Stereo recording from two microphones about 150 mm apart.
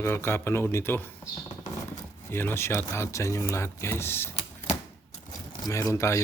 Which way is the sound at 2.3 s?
15° left (ahead or behind).